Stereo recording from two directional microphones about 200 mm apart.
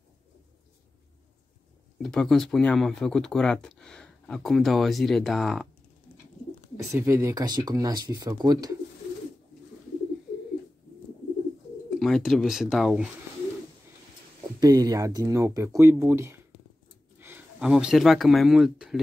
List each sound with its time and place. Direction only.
2.0 s speech: centre (ahead or behind)
6.8 s speech: 15° right (ahead or behind)
11.9 s speech: centre (ahead or behind)
14.6 s speech: 20° right (ahead or behind); by 18.9 s centre (ahead or behind)